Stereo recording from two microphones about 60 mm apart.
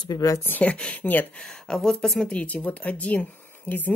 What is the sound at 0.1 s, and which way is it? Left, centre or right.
Speech, left.